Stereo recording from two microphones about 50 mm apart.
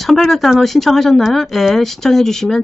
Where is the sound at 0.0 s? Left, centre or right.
Centre.